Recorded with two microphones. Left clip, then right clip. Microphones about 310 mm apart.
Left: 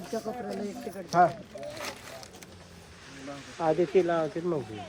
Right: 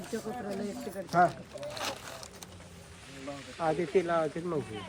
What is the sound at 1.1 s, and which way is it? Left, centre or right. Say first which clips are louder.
Speech: left 3 dB; left.